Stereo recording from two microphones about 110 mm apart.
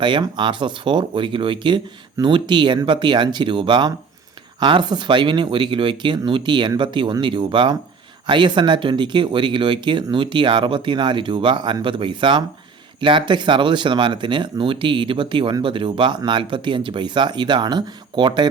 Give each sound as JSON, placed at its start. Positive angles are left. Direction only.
{"t": 0.0, "sound": "speech", "side_deg": -45}